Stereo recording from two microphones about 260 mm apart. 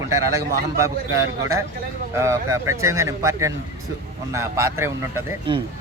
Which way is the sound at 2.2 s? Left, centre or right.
Centre.